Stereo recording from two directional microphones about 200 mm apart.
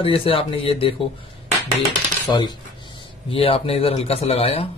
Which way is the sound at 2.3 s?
20° left (ahead or behind).